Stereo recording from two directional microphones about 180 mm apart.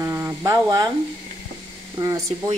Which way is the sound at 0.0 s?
15° right (ahead or behind).